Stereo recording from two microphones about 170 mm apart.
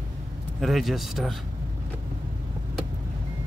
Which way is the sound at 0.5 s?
Centre (ahead or behind).